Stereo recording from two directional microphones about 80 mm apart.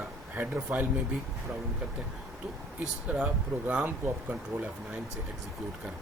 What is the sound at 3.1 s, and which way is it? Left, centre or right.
Speech, centre.